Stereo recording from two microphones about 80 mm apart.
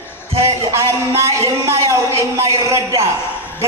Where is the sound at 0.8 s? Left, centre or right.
Right.